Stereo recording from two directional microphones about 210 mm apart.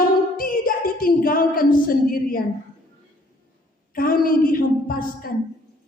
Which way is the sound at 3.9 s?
40° left (ahead or behind).